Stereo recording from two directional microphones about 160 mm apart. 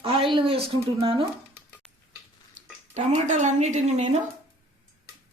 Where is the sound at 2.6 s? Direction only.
50° right (ahead or behind).